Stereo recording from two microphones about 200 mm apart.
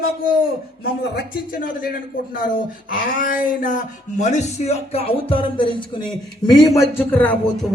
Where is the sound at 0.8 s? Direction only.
50° left (ahead or behind).